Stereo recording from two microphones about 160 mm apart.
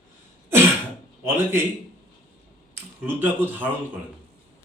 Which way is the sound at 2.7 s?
15° right (ahead or behind).